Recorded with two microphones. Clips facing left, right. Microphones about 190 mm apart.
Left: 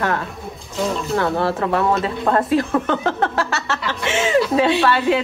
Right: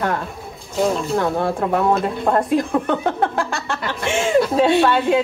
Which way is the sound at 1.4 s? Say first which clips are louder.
Even; 15° right (ahead or behind).